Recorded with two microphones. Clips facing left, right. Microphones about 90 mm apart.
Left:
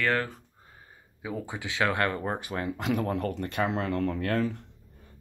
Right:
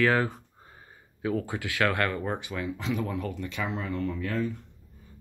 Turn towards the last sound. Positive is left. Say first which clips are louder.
# left 2 dB
turn(degrees=75)  # may be behind; listen again after turning